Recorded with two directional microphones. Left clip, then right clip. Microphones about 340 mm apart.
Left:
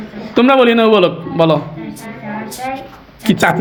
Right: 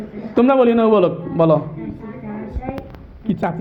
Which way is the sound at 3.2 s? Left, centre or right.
Centre.